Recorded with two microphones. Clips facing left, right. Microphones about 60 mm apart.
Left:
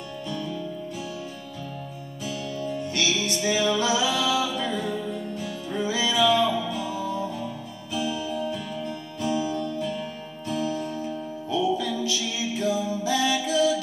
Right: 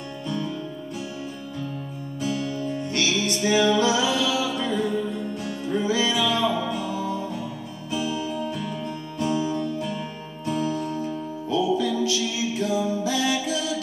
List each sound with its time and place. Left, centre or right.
3.0 s music: centre
9.5 s music: centre
10.4 s music: centre